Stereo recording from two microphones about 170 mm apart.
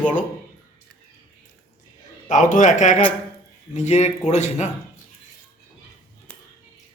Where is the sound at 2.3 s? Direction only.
50° left (ahead or behind).